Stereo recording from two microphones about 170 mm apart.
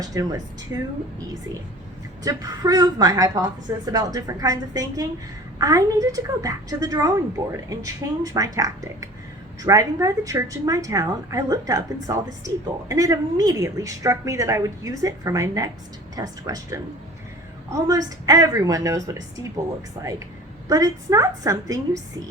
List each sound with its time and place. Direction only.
0.0 s a woman's voice: 20° right (ahead or behind)
2.2 s a woman's voice: 20° right (ahead or behind)